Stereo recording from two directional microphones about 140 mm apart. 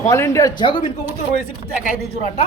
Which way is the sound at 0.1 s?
20° left (ahead or behind).